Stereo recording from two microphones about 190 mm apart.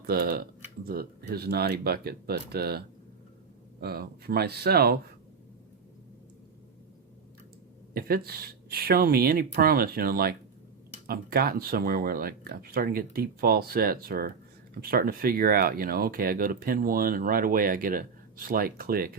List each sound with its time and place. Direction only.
0.0 s speech: 55° right (ahead or behind)
7.9 s speech: 50° right (ahead or behind)